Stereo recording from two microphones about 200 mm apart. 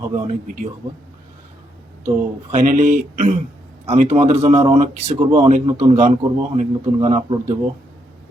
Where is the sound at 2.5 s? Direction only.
35° right (ahead or behind).